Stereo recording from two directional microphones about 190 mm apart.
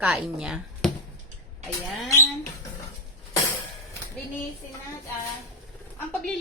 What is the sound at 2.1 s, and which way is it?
Speech, 15° left (ahead or behind).